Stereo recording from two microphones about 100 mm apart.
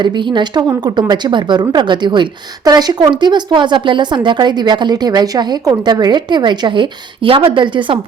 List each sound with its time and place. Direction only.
0.0 s speech: 50° right (ahead or behind)